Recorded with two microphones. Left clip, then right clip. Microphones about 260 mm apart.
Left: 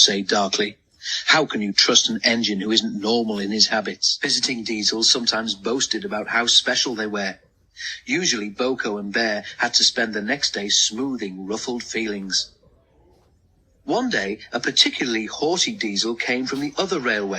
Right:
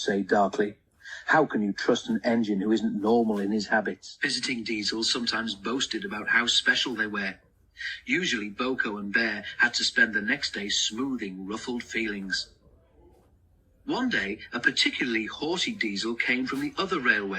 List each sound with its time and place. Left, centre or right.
0.0 s speech: right
4.2 s speech: centre
13.8 s speech: centre